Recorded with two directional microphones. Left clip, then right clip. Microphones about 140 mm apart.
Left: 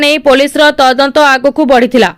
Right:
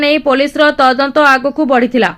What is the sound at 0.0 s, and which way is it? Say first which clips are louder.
Speech: left 4 dB; 55° left (ahead or behind).